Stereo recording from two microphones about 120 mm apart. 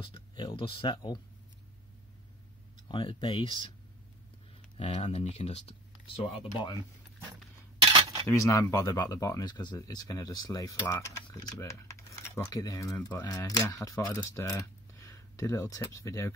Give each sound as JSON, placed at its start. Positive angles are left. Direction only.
{"t": 0.0, "sound": "speech", "side_deg": 45}
{"t": 2.9, "sound": "speech", "side_deg": 45}
{"t": 4.7, "sound": "speech", "side_deg": 60}
{"t": 7.8, "sound": "cutlery", "side_deg": -45}
{"t": 8.3, "sound": "speech", "side_deg": 25}